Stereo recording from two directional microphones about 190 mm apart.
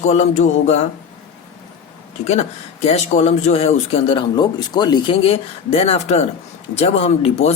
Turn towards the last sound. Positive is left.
turn(degrees=35)  # may be behind; listen again after turning